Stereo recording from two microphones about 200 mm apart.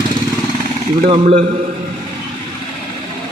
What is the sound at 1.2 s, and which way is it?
Speech, 30° right (ahead or behind).